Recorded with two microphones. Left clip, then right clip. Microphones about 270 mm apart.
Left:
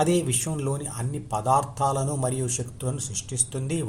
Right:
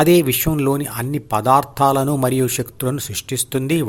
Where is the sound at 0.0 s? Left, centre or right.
Right.